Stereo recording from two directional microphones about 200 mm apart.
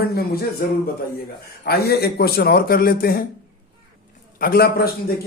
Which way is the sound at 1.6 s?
50° left (ahead or behind).